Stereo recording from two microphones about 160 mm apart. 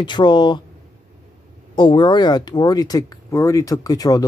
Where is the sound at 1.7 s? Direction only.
30° left (ahead or behind).